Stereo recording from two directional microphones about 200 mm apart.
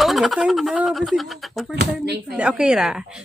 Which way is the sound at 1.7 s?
55° right (ahead or behind).